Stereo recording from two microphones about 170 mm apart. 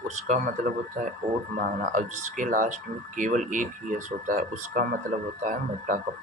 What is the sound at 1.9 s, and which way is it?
Speech, 50° right (ahead or behind).